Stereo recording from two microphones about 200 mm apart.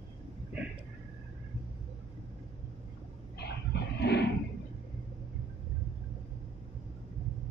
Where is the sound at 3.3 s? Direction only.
55° left (ahead or behind).